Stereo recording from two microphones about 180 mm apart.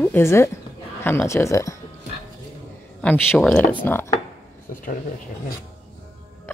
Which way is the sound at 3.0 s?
10° left (ahead or behind).